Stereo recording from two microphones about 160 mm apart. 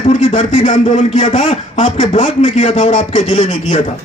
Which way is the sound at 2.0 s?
50° left (ahead or behind).